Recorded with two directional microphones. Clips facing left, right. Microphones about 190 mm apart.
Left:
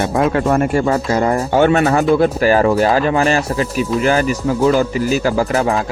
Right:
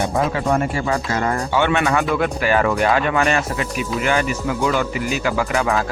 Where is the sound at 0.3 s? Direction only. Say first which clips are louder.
Left 5 dB; 50° left (ahead or behind).